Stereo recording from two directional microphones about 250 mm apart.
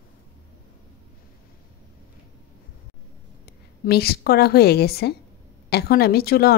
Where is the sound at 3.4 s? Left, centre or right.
Left.